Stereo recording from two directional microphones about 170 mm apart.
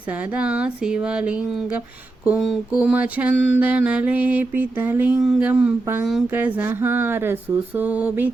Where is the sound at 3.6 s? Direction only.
10° right (ahead or behind).